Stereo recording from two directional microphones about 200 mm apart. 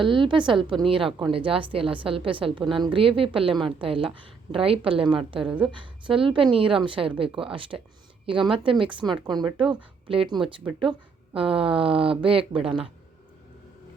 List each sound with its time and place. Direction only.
0.0 s a woman's voice: 25° right (ahead or behind)
5.5 s a woman's voice: 5° right (ahead or behind)
5.7 s a woman's voice: 25° right (ahead or behind)